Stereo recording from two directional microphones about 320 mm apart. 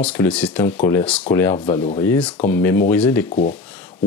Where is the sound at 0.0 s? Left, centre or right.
Centre.